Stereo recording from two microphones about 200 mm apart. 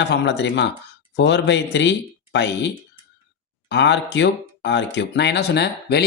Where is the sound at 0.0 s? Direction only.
60° left (ahead or behind).